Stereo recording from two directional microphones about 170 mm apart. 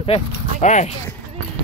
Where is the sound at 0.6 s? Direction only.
45° left (ahead or behind).